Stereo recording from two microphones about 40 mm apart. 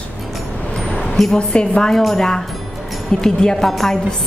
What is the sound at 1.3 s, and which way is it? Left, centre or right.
Speech, left.